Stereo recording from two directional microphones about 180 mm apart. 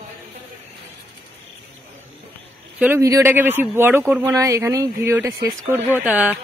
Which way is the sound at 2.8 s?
15° right (ahead or behind).